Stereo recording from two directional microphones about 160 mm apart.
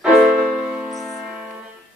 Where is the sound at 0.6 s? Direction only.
5° right (ahead or behind).